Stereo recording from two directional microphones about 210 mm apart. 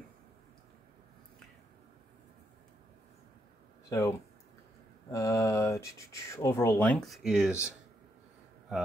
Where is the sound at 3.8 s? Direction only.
15° left (ahead or behind).